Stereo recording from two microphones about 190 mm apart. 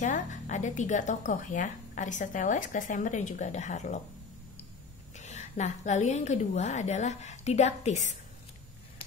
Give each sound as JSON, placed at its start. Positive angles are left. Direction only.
{"t": 0.0, "sound": "speech", "side_deg": 40}
{"t": 5.1, "sound": "speech", "side_deg": 35}